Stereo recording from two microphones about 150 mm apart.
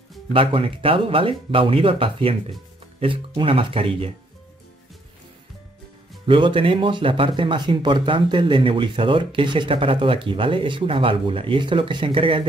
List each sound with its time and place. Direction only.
0.3 s speech: 35° right (ahead or behind)
6.2 s speech: 35° right (ahead or behind)